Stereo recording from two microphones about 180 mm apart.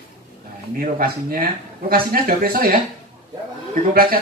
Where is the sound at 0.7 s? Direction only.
55° right (ahead or behind).